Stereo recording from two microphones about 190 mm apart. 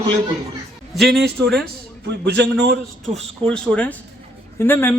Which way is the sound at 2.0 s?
60° right (ahead or behind).